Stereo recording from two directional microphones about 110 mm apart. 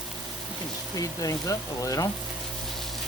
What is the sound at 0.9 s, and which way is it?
Speech, 30° left (ahead or behind).